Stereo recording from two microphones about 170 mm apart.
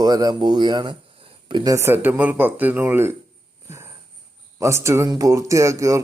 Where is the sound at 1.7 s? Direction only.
15° right (ahead or behind).